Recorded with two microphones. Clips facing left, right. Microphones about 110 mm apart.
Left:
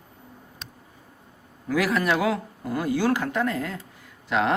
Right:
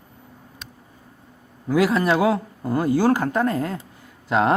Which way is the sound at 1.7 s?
25° right (ahead or behind).